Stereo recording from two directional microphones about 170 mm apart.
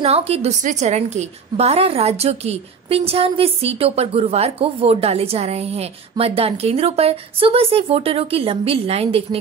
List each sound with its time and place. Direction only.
0.0 s a woman's voice: 35° right (ahead or behind)